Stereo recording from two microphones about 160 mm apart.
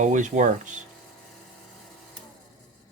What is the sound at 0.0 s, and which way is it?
Speech, 50° right (ahead or behind).